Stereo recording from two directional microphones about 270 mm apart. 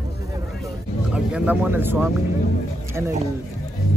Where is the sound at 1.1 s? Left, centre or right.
Centre.